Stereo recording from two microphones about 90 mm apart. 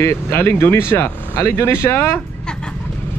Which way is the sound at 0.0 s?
30° left (ahead or behind).